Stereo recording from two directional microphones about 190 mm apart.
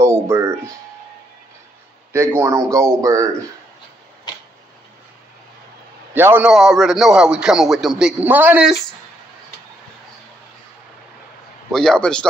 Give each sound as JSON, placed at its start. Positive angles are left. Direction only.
{"t": 0.0, "sound": "speech", "side_deg": -15}
{"t": 2.3, "sound": "speech", "side_deg": -15}
{"t": 6.1, "sound": "a man's voice", "side_deg": -10}
{"t": 11.7, "sound": "a man's voice", "side_deg": 5}